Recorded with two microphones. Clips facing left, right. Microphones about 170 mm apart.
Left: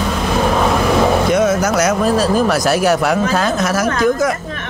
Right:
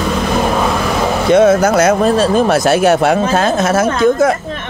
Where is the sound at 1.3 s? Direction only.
30° right (ahead or behind).